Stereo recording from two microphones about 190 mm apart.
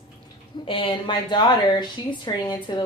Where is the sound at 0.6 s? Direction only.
30° left (ahead or behind).